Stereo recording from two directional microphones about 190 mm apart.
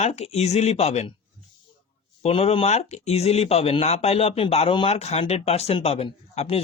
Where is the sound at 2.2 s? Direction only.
30° left (ahead or behind).